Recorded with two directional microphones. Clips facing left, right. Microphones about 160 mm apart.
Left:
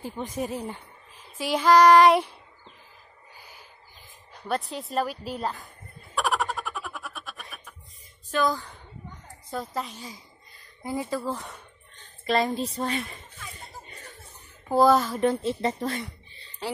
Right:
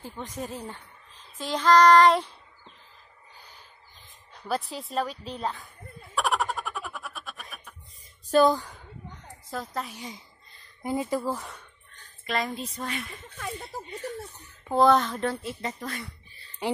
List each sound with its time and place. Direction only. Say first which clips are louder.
0.0 s speech: left 5 dB; 10° left (ahead or behind)
3.3 s owl: left 2 dB; 10° left (ahead or behind)
4.3 s a woman's voice: left 1 dB; centre (ahead or behind)
6.1 s a sound: even; centre (ahead or behind)
8.3 s speech: right 5 dB; 30° right (ahead or behind)
9.5 s a woman's voice: left 2 dB; centre (ahead or behind)
9.9 s speech: right 1 dB; 20° right (ahead or behind)
11.5 s a sound: left 1 dB; 20° left (ahead or behind)
12.3 s speech: left 6 dB; 35° left (ahead or behind)
14.7 s a woman's voice: left 1 dB; centre (ahead or behind)
15.1 s speech: left 6 dB; 20° left (ahead or behind)